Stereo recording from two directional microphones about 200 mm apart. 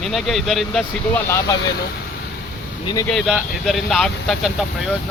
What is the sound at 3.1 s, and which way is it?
Speech, centre (ahead or behind).